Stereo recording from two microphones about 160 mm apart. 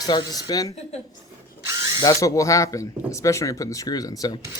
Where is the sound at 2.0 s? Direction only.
20° left (ahead or behind).